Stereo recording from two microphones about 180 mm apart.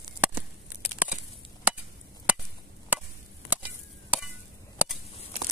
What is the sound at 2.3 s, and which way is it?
Chop, 10° right (ahead or behind).